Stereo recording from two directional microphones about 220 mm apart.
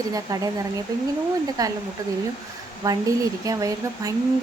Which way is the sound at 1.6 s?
15° right (ahead or behind).